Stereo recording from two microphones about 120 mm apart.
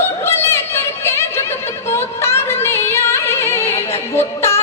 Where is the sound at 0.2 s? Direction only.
20° left (ahead or behind).